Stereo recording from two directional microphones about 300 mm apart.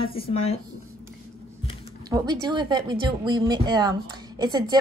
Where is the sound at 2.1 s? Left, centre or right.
Centre.